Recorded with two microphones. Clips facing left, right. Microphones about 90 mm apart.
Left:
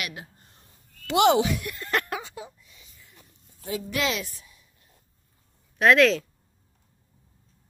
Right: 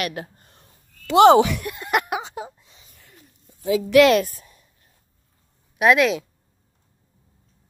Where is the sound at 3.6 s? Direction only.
85° right; by 4.7 s 45° right (ahead or behind).